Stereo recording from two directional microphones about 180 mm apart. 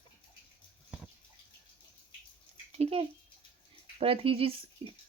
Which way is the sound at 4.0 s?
30° right (ahead or behind).